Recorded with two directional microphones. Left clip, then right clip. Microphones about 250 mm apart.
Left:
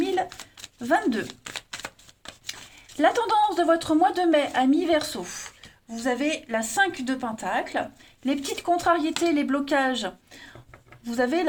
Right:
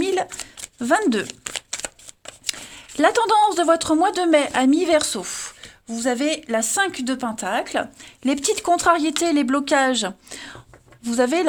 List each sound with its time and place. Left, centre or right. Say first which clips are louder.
0.0 s a sound: right 3 dB; right
0.8 s speech: right 4 dB; right
3.0 s speech: right 5 dB; right